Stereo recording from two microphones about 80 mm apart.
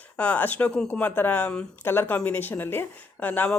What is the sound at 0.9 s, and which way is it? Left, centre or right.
Speech, left.